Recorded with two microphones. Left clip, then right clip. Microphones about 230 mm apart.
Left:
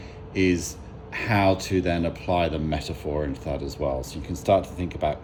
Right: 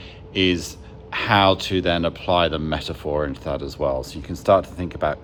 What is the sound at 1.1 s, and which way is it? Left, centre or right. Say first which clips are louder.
Speech: right 5 dB; right.